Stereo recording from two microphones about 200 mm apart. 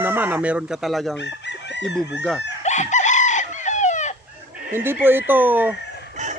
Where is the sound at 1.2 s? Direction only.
60° left (ahead or behind).